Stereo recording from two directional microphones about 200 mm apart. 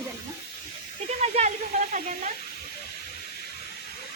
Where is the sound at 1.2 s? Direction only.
35° right (ahead or behind).